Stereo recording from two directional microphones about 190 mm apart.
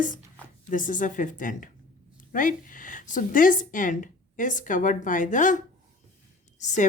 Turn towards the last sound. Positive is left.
turn(degrees=40)  # may be behind; listen again after turning